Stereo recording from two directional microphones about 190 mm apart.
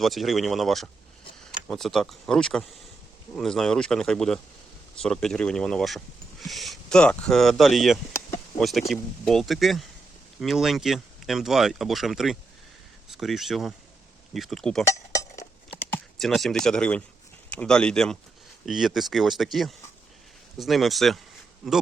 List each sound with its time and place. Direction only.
0.0 s speech: centre (ahead or behind)
14.8 s dishes: 15° left (ahead or behind)
15.8 s speech: 5° left (ahead or behind)